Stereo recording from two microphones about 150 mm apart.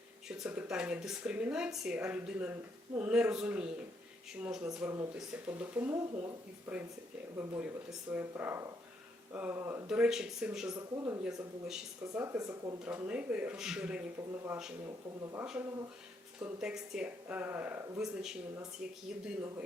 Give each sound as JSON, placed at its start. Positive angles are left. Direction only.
{"t": 0.3, "sound": "a woman's voice", "side_deg": -5}
{"t": 9.8, "sound": "speech", "side_deg": -5}
{"t": 10.9, "sound": "speech", "side_deg": -20}
{"t": 11.2, "sound": "speech", "side_deg": -5}
{"t": 12.1, "sound": "speech", "side_deg": -20}
{"t": 12.8, "sound": "a woman's voice", "side_deg": -10}
{"t": 16.4, "sound": "a woman's voice", "side_deg": -5}